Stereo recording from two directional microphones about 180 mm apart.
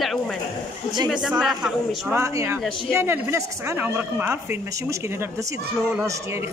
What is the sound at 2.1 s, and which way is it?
A woman's voice, 15° right (ahead or behind).